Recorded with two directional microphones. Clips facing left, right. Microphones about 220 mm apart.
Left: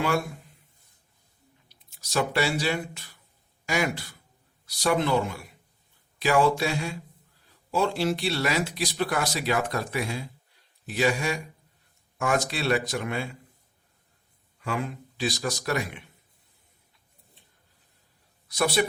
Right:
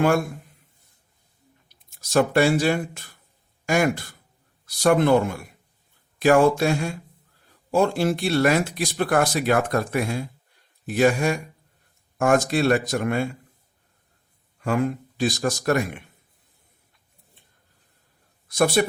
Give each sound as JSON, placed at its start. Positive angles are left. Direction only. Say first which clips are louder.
{"t": 1.7, "sound": "speech", "louder": "right 8 dB", "side_deg": -50}
{"t": 14.6, "sound": "speech", "louder": "right 8 dB", "side_deg": -50}
{"t": 18.4, "sound": "speech", "louder": "right 5 dB", "side_deg": -50}